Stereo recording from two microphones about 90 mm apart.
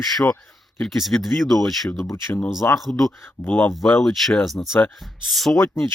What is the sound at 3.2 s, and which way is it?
Speech, 25° left (ahead or behind).